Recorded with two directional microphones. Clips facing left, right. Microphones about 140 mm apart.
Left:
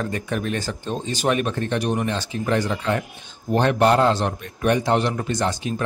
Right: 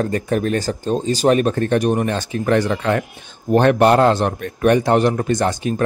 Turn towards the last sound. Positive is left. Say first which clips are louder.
# right 5 dB
turn(degrees=-50)  # may be behind; listen again after turning